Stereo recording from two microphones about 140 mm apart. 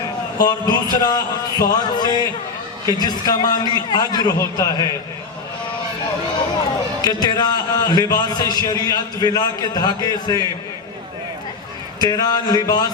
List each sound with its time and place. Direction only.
0.3 s speech: 30° left (ahead or behind)
7.0 s speech: 30° left (ahead or behind)
11.9 s speech: 25° left (ahead or behind)